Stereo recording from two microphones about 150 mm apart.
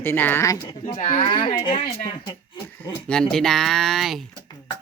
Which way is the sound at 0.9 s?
55° left (ahead or behind).